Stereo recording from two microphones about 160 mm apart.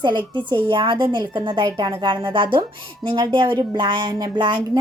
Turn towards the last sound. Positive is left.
turn(degrees=-30)  # may be behind; listen again after turning